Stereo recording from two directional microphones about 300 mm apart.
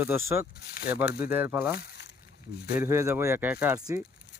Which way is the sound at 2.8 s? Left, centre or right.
Centre.